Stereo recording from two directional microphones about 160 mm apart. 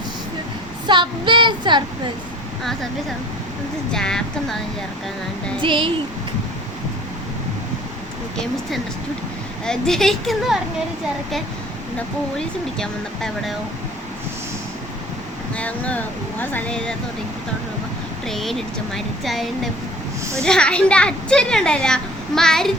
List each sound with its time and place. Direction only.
0.9 s child singing: 30° right (ahead or behind)
3.9 s speech: 5° left (ahead or behind)
5.6 s speech: 30° right (ahead or behind)
9.6 s speech: 5° left (ahead or behind)
12.4 s speech: 5° left (ahead or behind)
15.5 s speech: 10° left (ahead or behind)
18.3 s speech: centre (ahead or behind)